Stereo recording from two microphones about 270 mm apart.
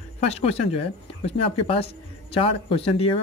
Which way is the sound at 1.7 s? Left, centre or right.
Left.